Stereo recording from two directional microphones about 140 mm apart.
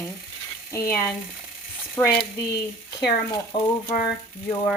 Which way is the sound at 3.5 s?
35° left (ahead or behind).